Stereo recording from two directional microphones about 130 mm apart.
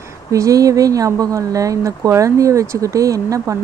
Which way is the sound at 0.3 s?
25° right (ahead or behind).